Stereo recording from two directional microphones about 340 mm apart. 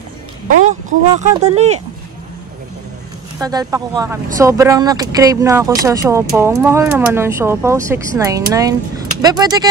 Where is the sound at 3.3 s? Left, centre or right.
Centre.